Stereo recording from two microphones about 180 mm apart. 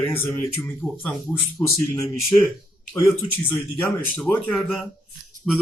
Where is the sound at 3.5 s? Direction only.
10° left (ahead or behind).